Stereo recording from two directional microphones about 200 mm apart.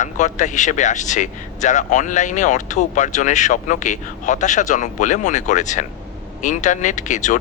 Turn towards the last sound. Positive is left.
turn(degrees=40)  # may be behind; listen again after turning